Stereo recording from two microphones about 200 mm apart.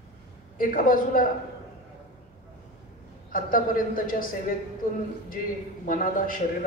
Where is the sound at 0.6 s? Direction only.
45° left (ahead or behind).